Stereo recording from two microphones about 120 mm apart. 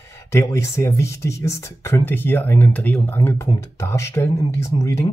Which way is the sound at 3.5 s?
25° left (ahead or behind).